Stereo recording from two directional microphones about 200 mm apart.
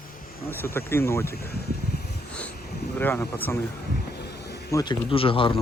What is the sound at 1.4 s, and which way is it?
Speech, 50° left (ahead or behind).